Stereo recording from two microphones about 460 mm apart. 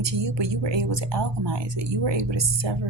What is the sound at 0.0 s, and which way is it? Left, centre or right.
Speech, right.